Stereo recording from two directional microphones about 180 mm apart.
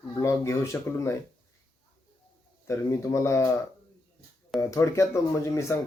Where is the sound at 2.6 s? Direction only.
15° left (ahead or behind).